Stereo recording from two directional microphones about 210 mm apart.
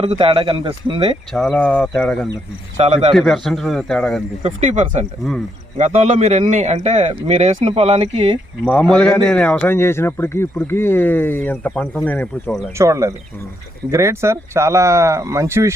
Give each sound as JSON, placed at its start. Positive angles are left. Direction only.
{"t": 0.0, "sound": "speech", "side_deg": -25}
{"t": 1.3, "sound": "a man's voice", "side_deg": 5}
{"t": 2.7, "sound": "speech", "side_deg": -30}
{"t": 3.2, "sound": "a man's voice", "side_deg": 0}
{"t": 4.4, "sound": "a man's voice", "side_deg": -35}
{"t": 8.6, "sound": "a man's voice", "side_deg": 5}
{"t": 12.7, "sound": "speech", "side_deg": -15}